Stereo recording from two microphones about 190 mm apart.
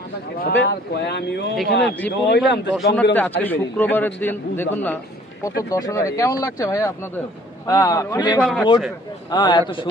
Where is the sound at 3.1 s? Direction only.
10° left (ahead or behind).